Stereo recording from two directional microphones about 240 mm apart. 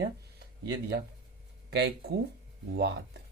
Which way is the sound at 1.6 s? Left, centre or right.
Right.